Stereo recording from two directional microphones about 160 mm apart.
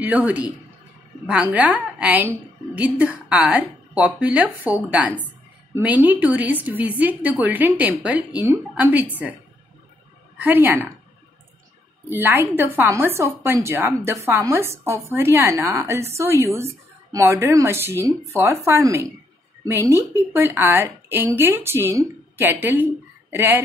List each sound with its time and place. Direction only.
0.0 s a woman's voice: 10° right (ahead or behind)
10.4 s a woman's voice: 10° right (ahead or behind)
12.1 s a woman's voice: 10° right (ahead or behind)